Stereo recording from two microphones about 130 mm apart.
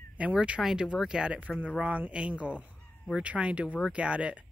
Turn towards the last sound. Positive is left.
turn(degrees=-10)  # may be behind; listen again after turning